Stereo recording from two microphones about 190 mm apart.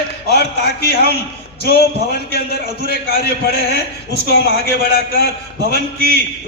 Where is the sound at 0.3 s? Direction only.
60° left (ahead or behind).